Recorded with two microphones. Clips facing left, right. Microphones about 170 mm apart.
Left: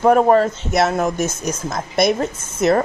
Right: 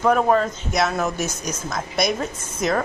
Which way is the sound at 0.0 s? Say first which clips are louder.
Left 5 dB; 30° left (ahead or behind).